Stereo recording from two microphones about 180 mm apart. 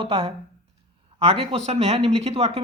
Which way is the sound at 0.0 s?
30° right (ahead or behind).